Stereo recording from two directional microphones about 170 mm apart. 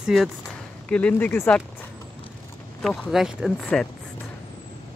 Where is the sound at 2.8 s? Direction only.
Centre (ahead or behind).